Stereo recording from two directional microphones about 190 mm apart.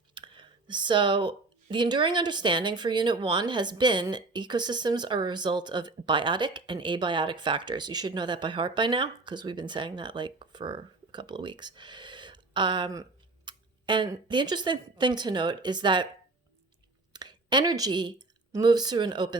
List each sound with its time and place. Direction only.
0.1 s a sound: 25° right (ahead or behind)
1.7 s speech: 25° right (ahead or behind)
17.1 s speech: 20° right (ahead or behind)